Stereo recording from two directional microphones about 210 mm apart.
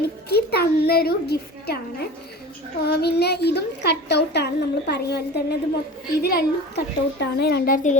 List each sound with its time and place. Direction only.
0.3 s a woman's voice: 50° left (ahead or behind)